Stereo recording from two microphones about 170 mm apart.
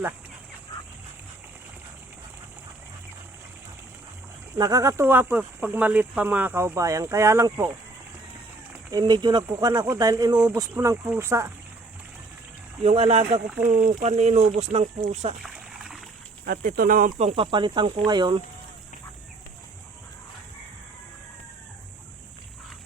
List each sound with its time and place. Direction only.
4.5 s speech: 20° right (ahead or behind)
8.9 s speech: 25° right (ahead or behind)
10.3 s speech: 5° right (ahead or behind)
10.6 s speech: 20° right (ahead or behind)
12.8 s speech: 35° right (ahead or behind)
15.4 s splash: centre (ahead or behind)
16.5 s speech: 55° right (ahead or behind)
17.2 s speech: 35° right (ahead or behind)